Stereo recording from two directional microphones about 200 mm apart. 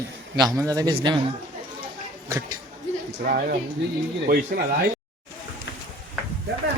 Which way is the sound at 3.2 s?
50° right (ahead or behind).